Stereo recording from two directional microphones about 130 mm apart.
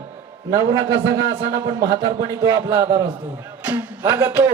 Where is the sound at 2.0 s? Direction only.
25° right (ahead or behind).